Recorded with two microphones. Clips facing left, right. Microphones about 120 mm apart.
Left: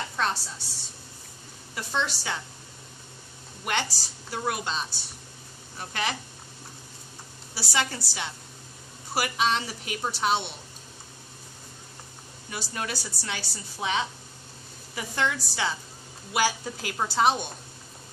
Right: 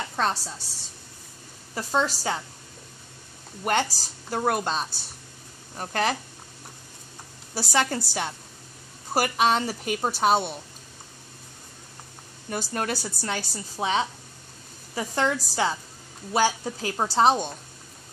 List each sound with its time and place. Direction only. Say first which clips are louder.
0.1 s a sound: right 3 dB; 35° right (ahead or behind)
1.8 s speech: right 5 dB; 40° right (ahead or behind)
3.6 s a woman's voice: right 5 dB; 45° right (ahead or behind)
7.5 s a woman's voice: right 5 dB; 45° right (ahead or behind)
12.4 s a woman's voice: right 5 dB; 45° right (ahead or behind)